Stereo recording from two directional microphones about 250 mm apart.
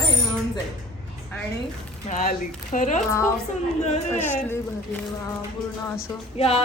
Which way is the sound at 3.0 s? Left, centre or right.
Centre.